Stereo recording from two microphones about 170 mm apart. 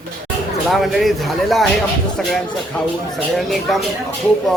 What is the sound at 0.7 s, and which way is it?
A man's voice, centre (ahead or behind).